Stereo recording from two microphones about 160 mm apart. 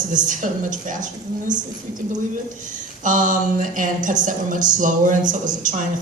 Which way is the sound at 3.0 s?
55° right (ahead or behind).